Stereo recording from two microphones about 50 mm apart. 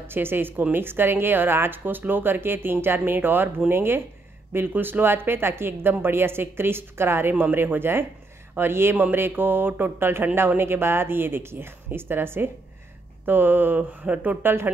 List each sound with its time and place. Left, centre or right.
0.0 s a woman's voice: right
13.7 s speech: right
14.4 s a woman's voice: right